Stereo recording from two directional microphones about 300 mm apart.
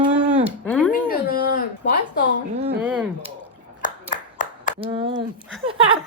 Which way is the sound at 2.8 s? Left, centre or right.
Centre.